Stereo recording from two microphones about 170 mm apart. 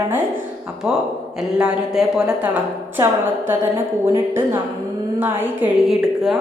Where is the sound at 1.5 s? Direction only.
5° right (ahead or behind).